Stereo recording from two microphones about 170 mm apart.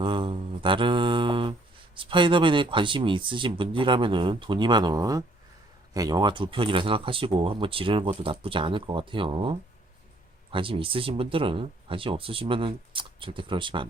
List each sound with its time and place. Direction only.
0.0 s mantra: 30° right (ahead or behind)
2.0 s speech: 30° right (ahead or behind)